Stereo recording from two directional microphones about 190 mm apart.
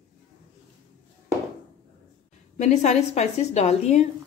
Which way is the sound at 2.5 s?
40° left (ahead or behind).